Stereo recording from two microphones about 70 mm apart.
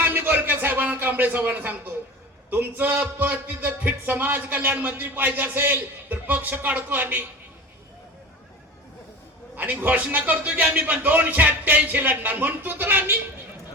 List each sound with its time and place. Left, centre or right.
0.0 s a sound: right
2.5 s speech: right
9.6 s speech: right